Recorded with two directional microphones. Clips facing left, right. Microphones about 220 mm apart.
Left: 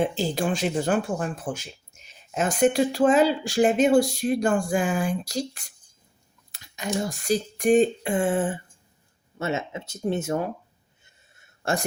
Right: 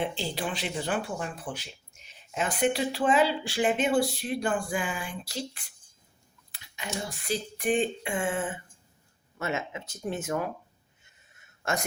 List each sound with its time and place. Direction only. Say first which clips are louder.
0.0 s speech: left 7 dB; 45° left (ahead or behind)
6.5 s a sound: left 8 dB; 45° left (ahead or behind)
9.4 s speech: left 4 dB; 25° left (ahead or behind)
11.6 s a man's voice: left 4 dB; 30° left (ahead or behind)